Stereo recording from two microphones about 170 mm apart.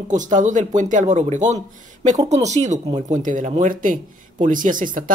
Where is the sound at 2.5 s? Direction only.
40° right (ahead or behind).